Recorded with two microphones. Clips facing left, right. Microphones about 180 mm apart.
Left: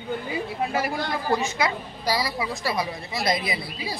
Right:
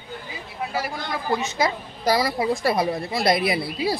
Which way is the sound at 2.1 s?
50° right (ahead or behind).